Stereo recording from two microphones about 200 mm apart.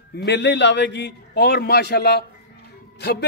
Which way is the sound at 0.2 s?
60° left (ahead or behind).